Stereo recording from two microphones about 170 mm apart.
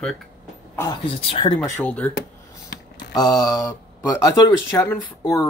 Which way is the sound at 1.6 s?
10° left (ahead or behind).